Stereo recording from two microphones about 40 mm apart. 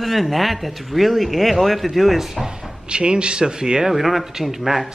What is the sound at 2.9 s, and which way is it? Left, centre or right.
Speech, right.